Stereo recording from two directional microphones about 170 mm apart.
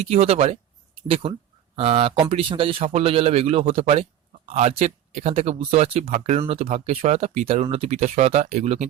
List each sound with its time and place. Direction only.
0.0 s speech: 35° right (ahead or behind)
6.1 s speech: 55° right (ahead or behind)
6.5 s speech: 35° right (ahead or behind)